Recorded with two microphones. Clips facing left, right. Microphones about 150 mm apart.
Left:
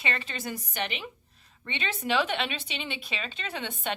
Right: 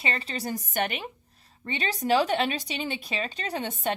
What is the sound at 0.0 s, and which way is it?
A woman's voice, 35° right (ahead or behind).